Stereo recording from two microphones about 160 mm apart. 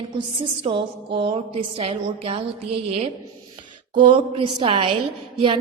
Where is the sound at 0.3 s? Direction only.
35° right (ahead or behind).